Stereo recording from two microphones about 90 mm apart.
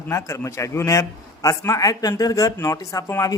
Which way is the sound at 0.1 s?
35° left (ahead or behind).